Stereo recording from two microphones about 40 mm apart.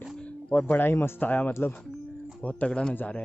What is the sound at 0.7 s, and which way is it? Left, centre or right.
Speech, left.